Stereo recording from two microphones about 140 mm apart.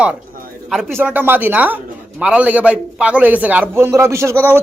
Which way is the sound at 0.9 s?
15° right (ahead or behind).